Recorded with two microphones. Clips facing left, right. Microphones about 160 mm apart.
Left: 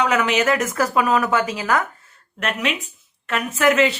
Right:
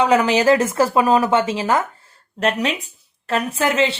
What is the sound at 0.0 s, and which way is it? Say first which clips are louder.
A woman's voice: right 4 dB; 35° right (ahead or behind).